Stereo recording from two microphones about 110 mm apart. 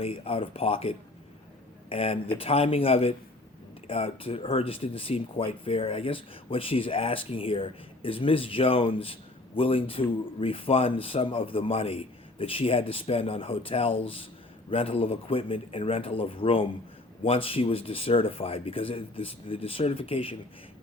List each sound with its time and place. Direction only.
0.0 s speech: 60° left (ahead or behind)